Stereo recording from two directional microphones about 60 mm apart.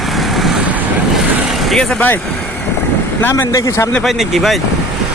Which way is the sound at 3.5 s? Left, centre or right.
Left.